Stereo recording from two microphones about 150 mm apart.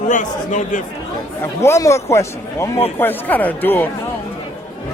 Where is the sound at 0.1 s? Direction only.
55° left (ahead or behind).